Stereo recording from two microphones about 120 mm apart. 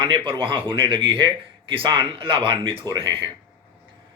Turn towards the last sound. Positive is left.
turn(degrees=-40)  # may be behind; listen again after turning